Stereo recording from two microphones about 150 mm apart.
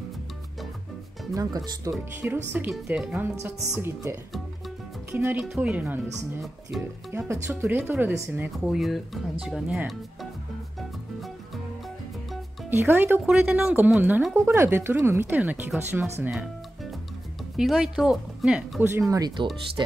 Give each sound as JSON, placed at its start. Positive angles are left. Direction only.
{"t": 1.3, "sound": "speech", "side_deg": -25}
{"t": 4.3, "sound": "music", "side_deg": 0}
{"t": 5.4, "sound": "speech", "side_deg": -5}
{"t": 10.8, "sound": "music", "side_deg": 0}
{"t": 12.6, "sound": "speech", "side_deg": -15}
{"t": 17.6, "sound": "speech", "side_deg": -5}
{"t": 19.0, "sound": "speech", "side_deg": -25}